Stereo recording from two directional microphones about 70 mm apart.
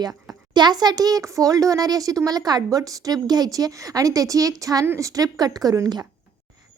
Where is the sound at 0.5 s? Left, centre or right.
Right.